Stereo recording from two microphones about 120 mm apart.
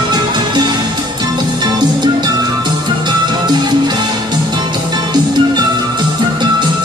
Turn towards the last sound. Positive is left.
turn(degrees=-40)  # may be behind; listen again after turning